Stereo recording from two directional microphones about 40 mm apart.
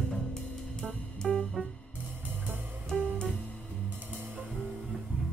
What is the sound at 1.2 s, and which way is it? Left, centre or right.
Music, centre.